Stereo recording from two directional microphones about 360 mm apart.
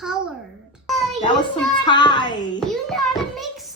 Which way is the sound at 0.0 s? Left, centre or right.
Centre.